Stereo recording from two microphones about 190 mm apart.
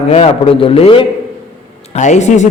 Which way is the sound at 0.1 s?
30° left (ahead or behind).